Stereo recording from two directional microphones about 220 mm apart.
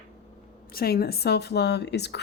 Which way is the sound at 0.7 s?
45° left (ahead or behind).